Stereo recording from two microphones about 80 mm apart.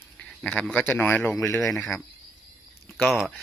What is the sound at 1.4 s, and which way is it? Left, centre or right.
Speech, left.